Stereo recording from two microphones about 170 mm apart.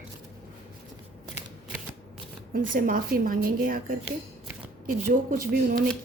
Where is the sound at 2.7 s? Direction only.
55° right (ahead or behind).